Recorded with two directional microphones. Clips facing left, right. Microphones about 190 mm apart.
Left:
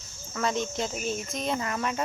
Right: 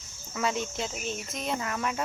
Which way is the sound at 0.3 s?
5° right (ahead or behind).